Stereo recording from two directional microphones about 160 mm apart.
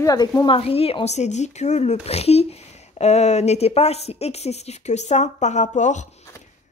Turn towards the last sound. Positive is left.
turn(degrees=50)  # may be behind; listen again after turning